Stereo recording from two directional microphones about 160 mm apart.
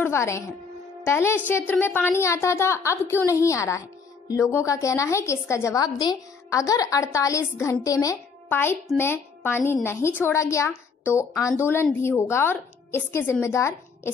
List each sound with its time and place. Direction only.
0.0 s a woman's voice: 15° left (ahead or behind)